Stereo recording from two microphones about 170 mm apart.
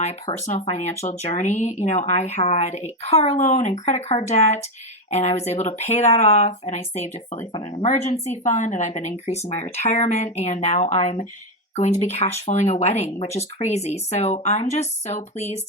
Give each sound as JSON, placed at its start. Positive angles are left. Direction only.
{"t": 0.0, "sound": "speech", "side_deg": 40}